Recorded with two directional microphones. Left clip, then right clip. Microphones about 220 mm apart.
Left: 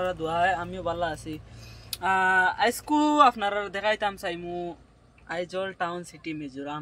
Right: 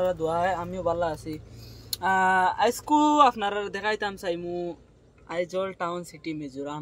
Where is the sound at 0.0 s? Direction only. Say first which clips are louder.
Even; centre (ahead or behind).